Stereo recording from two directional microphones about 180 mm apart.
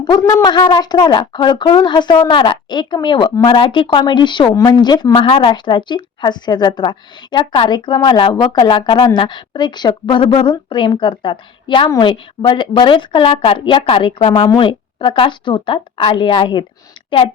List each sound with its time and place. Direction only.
0.0 s speech: 20° left (ahead or behind)